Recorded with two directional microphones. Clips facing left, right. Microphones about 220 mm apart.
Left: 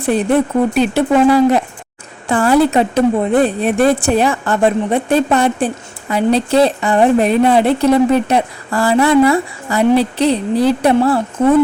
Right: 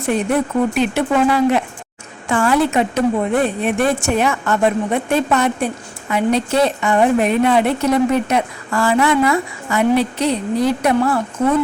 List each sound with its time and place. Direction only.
0.0 s a woman's voice: 35° left (ahead or behind)